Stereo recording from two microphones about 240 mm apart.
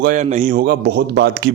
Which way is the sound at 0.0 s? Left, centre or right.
Right.